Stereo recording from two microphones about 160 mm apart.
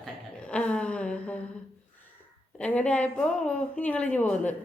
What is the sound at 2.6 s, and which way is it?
Speech, 10° left (ahead or behind).